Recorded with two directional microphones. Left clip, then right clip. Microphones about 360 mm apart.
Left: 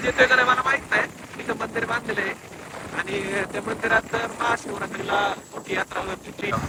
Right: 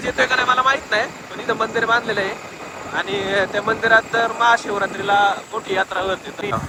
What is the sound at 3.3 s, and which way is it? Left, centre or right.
Speech, centre.